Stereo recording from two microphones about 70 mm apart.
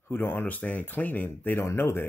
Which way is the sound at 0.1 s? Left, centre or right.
Left.